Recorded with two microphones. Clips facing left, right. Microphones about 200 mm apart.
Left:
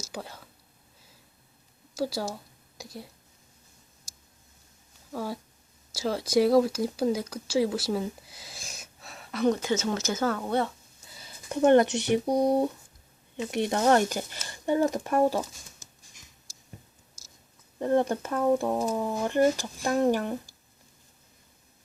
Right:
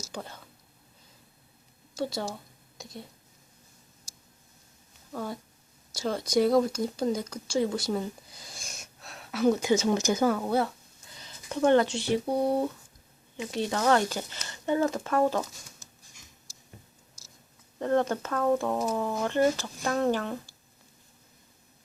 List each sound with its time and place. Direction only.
0.1 s whispering: 5° left (ahead or behind)
2.0 s a woman's voice: 5° left (ahead or behind)
5.1 s speech: 5° left (ahead or behind)
11.6 s speech: 20° left (ahead or behind)
14.0 s speech: 10° left (ahead or behind)
17.7 s speech: 15° left (ahead or behind)